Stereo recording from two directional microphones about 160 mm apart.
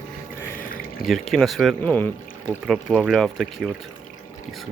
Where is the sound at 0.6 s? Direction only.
65° left (ahead or behind).